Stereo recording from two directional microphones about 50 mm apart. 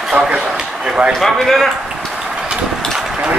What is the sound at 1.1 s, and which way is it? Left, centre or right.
Speech, centre.